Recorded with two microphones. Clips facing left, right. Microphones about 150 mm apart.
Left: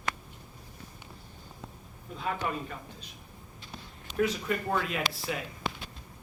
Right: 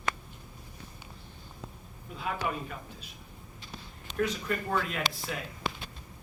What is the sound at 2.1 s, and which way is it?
Speech, 5° right (ahead or behind).